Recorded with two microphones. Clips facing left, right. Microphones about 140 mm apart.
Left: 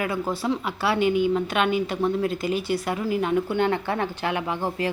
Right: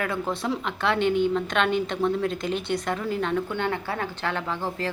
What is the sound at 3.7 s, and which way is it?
Speech, 30° left (ahead or behind).